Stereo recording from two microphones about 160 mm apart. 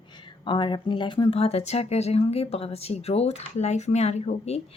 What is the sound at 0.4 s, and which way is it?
Speech, 30° left (ahead or behind).